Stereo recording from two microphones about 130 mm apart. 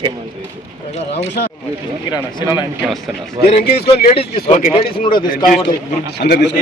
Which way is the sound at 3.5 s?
50° left (ahead or behind).